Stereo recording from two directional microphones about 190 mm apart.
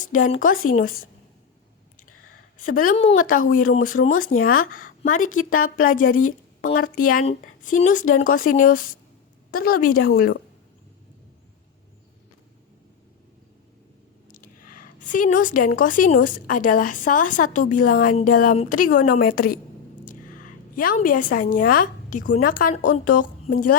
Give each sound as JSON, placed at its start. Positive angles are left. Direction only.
{"t": 0.0, "sound": "a woman's voice", "side_deg": 45}
{"t": 2.6, "sound": "a woman's voice", "side_deg": 45}
{"t": 14.3, "sound": "a woman's voice", "side_deg": 45}
{"t": 20.1, "sound": "a sound", "side_deg": 45}
{"t": 21.3, "sound": "a woman's voice", "side_deg": 50}